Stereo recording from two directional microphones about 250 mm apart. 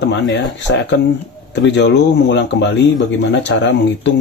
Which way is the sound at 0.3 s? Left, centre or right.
Left.